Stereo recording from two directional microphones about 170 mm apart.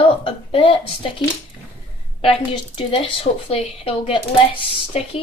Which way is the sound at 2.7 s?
30° left (ahead or behind).